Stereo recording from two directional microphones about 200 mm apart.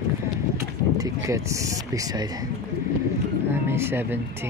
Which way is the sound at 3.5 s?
10° right (ahead or behind).